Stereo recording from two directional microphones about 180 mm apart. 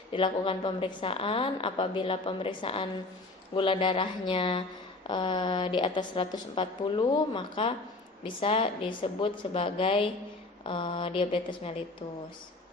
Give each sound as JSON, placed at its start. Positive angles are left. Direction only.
{"t": 0.1, "sound": "a woman's voice", "side_deg": 30}